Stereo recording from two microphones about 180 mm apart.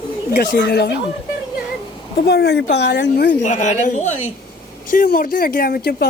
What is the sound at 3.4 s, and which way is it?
Speech, 40° left (ahead or behind).